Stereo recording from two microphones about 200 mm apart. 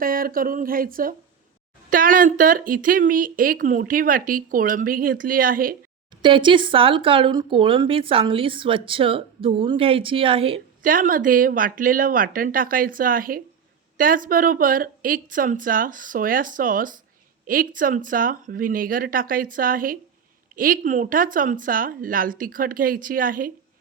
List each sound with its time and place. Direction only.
0.0 s speech: 45° right (ahead or behind)
6.2 s speech: 25° right (ahead or behind)
10.8 s speech: 45° right (ahead or behind)